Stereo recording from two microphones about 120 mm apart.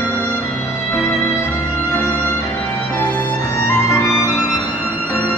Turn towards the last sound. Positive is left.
turn(degrees=25)  # may be behind; listen again after turning